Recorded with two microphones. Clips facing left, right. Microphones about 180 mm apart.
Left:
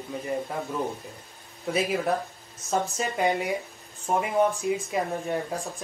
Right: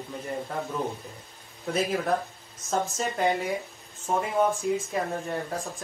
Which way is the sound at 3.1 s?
15° left (ahead or behind).